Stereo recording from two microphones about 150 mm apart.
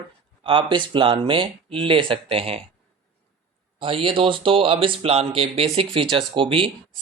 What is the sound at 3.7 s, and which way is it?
Speech, 35° right (ahead or behind).